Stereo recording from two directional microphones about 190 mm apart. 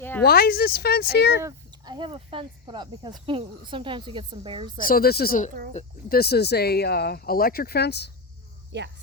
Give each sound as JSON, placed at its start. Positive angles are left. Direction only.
{"t": 0.2, "sound": "speech", "side_deg": 55}
{"t": 1.4, "sound": "speech", "side_deg": -20}
{"t": 4.9, "sound": "speech", "side_deg": 50}
{"t": 8.7, "sound": "speech", "side_deg": -65}